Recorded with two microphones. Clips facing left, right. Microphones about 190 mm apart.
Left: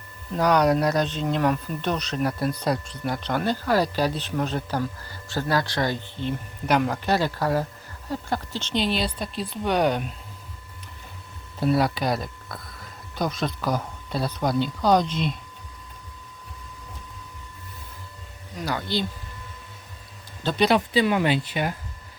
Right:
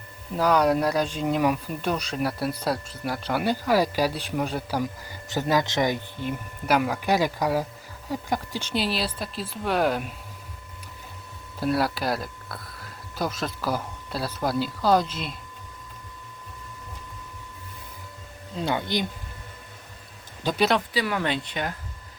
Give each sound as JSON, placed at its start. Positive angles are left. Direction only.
{"t": 0.3, "sound": "speech", "side_deg": -5}
{"t": 11.6, "sound": "speech", "side_deg": 0}
{"t": 18.5, "sound": "speech", "side_deg": -25}
{"t": 20.4, "sound": "speech", "side_deg": -10}
{"t": 20.9, "sound": "speech", "side_deg": 20}
{"t": 21.2, "sound": "speech", "side_deg": 5}